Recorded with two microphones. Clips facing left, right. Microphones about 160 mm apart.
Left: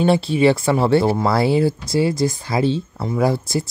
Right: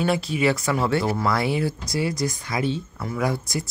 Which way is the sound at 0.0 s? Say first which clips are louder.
Left 7 dB; 30° left (ahead or behind).